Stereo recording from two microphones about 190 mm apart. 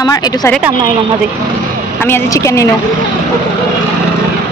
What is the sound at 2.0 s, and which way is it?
Speech, 15° left (ahead or behind).